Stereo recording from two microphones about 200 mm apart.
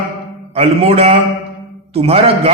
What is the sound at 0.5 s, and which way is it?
A man's voice, 30° right (ahead or behind).